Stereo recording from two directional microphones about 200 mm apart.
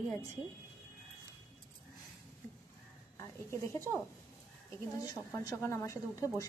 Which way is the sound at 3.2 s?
10° left (ahead or behind).